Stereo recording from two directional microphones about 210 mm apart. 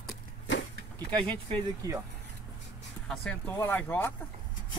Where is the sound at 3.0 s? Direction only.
5° left (ahead or behind).